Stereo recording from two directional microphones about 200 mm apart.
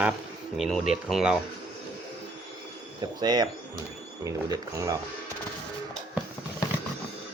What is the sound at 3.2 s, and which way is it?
Speech, 20° right (ahead or behind).